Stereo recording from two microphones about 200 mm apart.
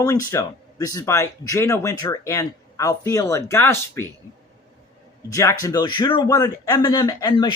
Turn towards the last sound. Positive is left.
turn(degrees=20)  # may be behind; listen again after turning